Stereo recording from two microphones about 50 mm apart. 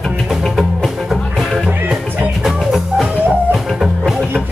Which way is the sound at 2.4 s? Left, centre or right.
Centre.